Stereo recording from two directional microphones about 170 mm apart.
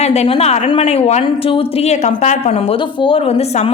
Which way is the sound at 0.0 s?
40° left (ahead or behind).